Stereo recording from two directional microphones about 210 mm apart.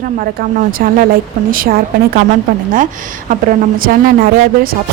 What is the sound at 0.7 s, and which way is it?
Speech, 45° right (ahead or behind).